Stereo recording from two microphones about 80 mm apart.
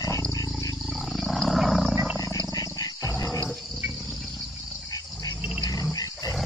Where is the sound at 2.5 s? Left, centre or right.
Left.